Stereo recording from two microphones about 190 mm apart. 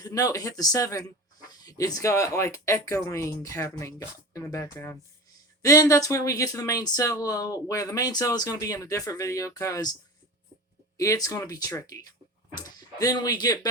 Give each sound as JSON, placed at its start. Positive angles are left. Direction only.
{"t": 0.0, "sound": "speech", "side_deg": 20}
{"t": 10.9, "sound": "speech", "side_deg": 15}